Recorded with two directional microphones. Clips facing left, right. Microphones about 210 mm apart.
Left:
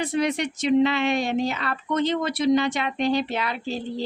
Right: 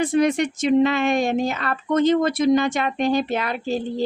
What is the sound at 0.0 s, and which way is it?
Speech, 50° right (ahead or behind).